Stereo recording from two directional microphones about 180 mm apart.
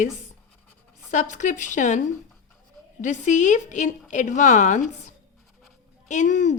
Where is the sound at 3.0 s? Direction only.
45° left (ahead or behind).